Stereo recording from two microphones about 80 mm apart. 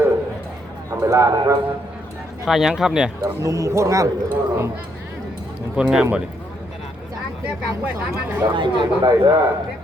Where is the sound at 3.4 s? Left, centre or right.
Right.